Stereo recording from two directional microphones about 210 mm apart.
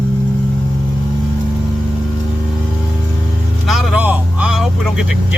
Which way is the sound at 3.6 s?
Centre (ahead or behind).